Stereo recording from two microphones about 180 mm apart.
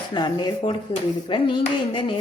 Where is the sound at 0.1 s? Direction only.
25° left (ahead or behind).